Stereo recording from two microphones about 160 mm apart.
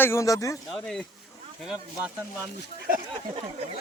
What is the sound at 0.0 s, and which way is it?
Speech, 15° left (ahead or behind).